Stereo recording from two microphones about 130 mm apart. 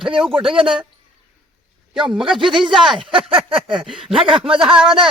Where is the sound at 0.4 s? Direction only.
40° right (ahead or behind).